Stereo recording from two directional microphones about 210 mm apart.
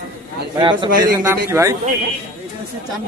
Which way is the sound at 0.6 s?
20° right (ahead or behind).